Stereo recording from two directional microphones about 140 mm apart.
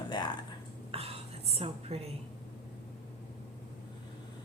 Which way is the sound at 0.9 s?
45° right (ahead or behind).